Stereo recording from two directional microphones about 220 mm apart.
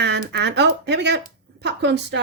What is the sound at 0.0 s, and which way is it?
A woman's voice, 50° right (ahead or behind).